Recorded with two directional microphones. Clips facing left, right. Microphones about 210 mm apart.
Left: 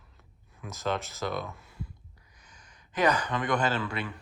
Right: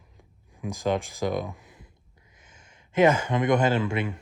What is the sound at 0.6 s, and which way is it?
Speech, 15° right (ahead or behind).